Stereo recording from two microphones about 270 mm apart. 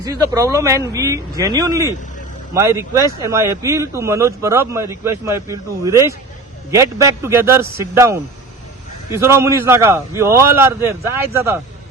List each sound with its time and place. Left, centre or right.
0.0 s speech: centre